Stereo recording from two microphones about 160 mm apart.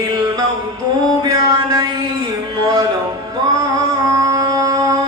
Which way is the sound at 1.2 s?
25° right (ahead or behind).